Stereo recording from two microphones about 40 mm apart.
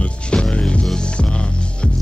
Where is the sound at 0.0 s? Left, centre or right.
Left.